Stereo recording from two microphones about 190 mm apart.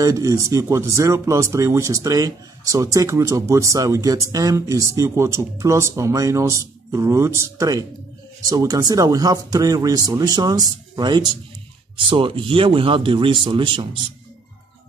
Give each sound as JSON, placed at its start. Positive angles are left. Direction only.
{"t": 0.0, "sound": "speech", "side_deg": -20}